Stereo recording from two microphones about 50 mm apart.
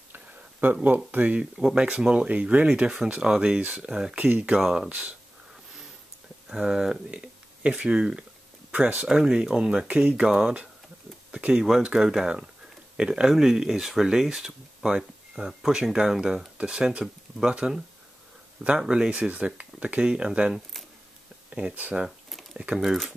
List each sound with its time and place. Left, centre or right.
0.8 s speech: right
1.8 s speech: centre
4.6 s speech: centre
4.8 s speech: right
6.5 s speech: centre
7.1 s speech: right
8.7 s speech: right
9.0 s speech: centre
19.0 s speech: right
21.5 s a sound: centre
22.8 s speech: centre